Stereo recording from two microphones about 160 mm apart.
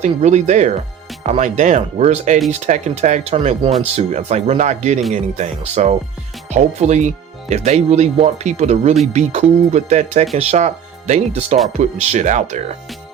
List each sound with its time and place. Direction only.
0.0 s speech: 45° right (ahead or behind)